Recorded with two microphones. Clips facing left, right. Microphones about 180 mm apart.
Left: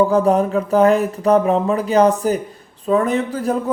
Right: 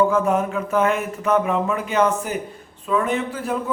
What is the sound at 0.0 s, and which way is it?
A man's voice, 35° left (ahead or behind).